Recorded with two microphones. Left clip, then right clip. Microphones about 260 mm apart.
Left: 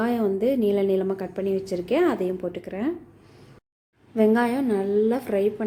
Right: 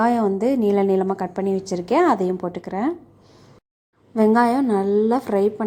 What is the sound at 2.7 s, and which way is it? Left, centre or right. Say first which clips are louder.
Speech: right 6 dB; centre.